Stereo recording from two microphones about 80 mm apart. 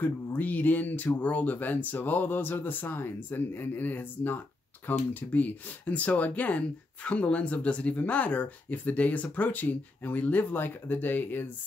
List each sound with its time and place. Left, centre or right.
0.0 s speech: left